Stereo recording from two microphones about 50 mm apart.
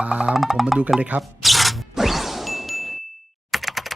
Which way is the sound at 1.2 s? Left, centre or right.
Centre.